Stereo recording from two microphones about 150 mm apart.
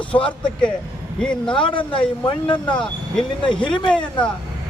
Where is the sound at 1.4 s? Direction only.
35° left (ahead or behind).